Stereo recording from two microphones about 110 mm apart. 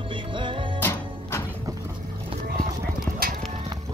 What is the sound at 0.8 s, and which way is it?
Music, 20° left (ahead or behind).